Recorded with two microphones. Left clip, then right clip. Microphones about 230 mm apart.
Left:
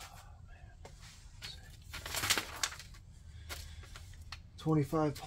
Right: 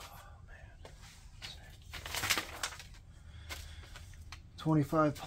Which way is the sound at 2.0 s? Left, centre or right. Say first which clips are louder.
Even; centre.